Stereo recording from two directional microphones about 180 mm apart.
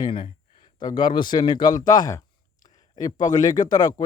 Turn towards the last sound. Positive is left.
turn(degrees=20)  # may be behind; listen again after turning